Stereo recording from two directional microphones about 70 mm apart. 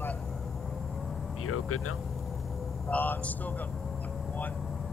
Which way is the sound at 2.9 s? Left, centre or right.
Left.